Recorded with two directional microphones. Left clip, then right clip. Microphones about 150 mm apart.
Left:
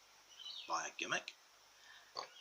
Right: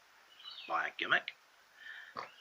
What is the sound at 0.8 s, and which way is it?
Speech, 45° left (ahead or behind).